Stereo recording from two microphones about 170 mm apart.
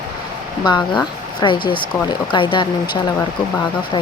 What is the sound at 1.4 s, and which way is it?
Speech, 30° left (ahead or behind).